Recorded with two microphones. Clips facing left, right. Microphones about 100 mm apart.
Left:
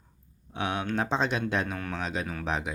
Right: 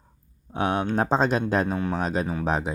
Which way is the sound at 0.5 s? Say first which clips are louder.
Right 6 dB; 40° right (ahead or behind).